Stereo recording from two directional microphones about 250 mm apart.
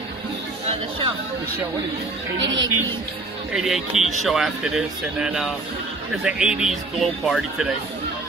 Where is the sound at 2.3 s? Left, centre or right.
Right.